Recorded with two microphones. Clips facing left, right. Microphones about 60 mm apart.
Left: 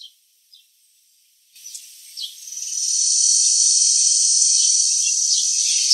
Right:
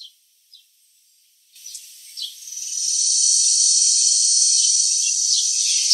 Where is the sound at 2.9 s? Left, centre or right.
Centre.